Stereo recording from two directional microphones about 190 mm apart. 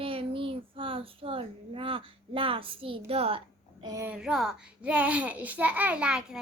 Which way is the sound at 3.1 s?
30° right (ahead or behind).